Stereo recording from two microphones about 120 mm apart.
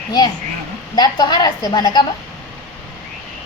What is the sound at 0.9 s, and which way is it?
A woman's voice, 35° left (ahead or behind).